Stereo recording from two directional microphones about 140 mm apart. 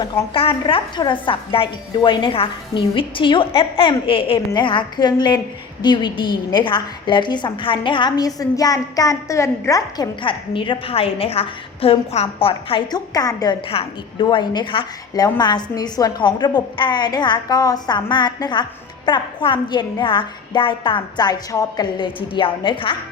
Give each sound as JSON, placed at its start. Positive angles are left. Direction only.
{"t": 0.0, "sound": "a woman's voice", "side_deg": 35}
{"t": 13.1, "sound": "a woman's voice", "side_deg": 25}
{"t": 13.7, "sound": "a woman's voice", "side_deg": 40}